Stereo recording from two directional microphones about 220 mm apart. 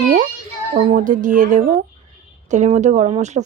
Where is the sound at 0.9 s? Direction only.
35° right (ahead or behind).